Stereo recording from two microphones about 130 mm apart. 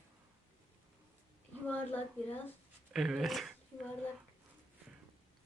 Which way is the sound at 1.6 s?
15° left (ahead or behind).